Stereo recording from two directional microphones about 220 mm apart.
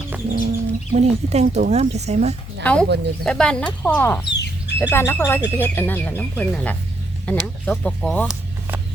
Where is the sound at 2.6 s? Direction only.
5° left (ahead or behind).